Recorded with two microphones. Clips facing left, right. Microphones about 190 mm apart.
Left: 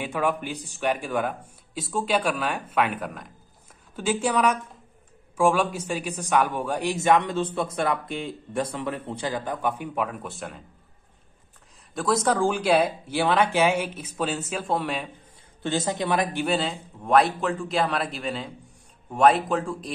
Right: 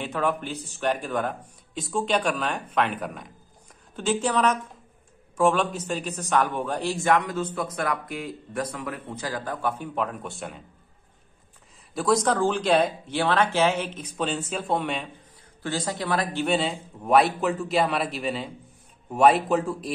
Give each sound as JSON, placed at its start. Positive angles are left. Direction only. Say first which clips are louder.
{"t": 0.0, "sound": "a man's voice", "louder": "left 1 dB", "side_deg": 10}
{"t": 11.9, "sound": "speech", "louder": "right 1 dB", "side_deg": 0}
{"t": 15.6, "sound": "speech", "louder": "left 3 dB", "side_deg": 20}
{"t": 16.4, "sound": "speech", "louder": "right 1 dB", "side_deg": 0}